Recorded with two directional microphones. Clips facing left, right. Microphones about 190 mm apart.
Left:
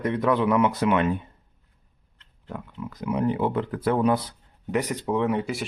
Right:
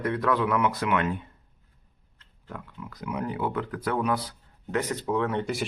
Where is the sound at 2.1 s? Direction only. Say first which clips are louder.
Left 4 dB; 20° left (ahead or behind).